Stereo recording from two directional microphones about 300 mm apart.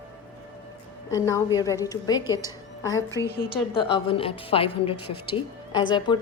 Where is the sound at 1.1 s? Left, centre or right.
Centre.